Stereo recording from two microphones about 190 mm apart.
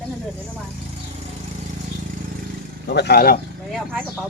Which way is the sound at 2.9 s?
60° left (ahead or behind).